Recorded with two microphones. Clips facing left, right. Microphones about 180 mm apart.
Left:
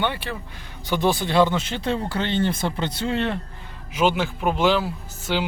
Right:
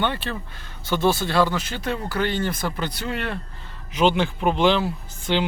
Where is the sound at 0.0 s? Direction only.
15° left (ahead or behind).